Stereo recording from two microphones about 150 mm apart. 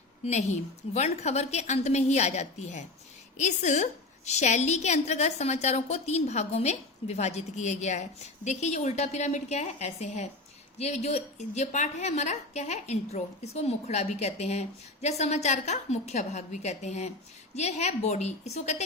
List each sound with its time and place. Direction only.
0.3 s a woman's voice: 50° left (ahead or behind)